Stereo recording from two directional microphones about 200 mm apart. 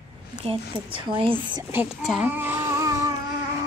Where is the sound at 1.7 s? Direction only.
5° right (ahead or behind).